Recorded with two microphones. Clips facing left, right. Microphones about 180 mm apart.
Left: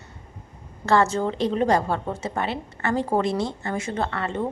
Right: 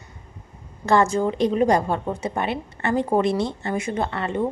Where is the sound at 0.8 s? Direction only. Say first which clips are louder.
Right 2 dB; 15° right (ahead or behind).